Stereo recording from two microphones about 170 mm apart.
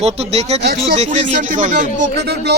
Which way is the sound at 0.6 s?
65° right (ahead or behind).